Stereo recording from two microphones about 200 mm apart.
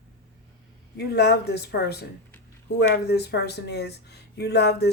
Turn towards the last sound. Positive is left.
turn(degrees=55)  # may be behind; listen again after turning